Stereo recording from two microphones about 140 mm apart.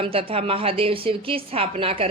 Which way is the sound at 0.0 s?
40° right (ahead or behind).